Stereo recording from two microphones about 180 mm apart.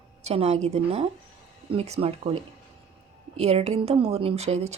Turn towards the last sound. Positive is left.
turn(degrees=-35)  # may be behind; listen again after turning